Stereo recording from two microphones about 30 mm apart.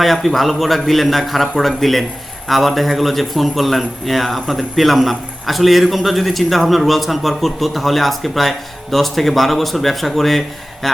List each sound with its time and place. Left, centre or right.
0.0 s a man's voice: centre